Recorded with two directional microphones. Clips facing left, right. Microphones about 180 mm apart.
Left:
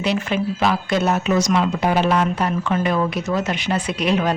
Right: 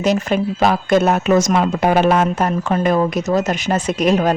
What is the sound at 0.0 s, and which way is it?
Speech, 45° right (ahead or behind).